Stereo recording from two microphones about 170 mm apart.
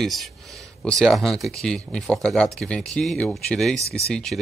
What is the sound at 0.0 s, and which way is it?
Speech, centre (ahead or behind).